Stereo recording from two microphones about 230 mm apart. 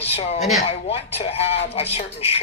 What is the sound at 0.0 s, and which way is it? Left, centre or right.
Speech, left.